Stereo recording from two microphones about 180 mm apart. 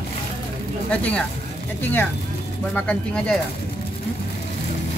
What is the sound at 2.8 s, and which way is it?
Speech, 5° left (ahead or behind).